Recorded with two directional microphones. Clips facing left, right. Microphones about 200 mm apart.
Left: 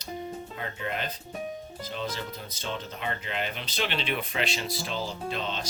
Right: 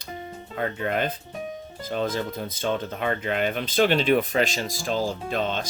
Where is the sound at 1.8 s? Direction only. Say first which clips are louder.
Right 9 dB; 50° right (ahead or behind).